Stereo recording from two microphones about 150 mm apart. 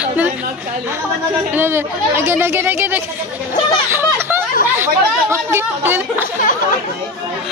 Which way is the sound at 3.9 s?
15° right (ahead or behind).